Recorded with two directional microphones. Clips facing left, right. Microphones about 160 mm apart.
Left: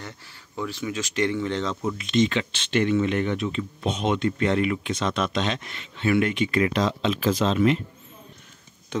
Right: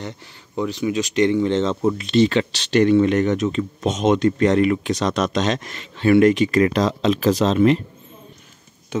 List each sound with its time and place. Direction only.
0.6 s speech: 20° right (ahead or behind)
1.9 s speech: 35° right (ahead or behind)